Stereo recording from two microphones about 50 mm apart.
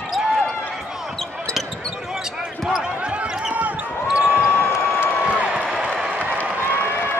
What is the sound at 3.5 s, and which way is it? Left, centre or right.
Basketball bounce, right.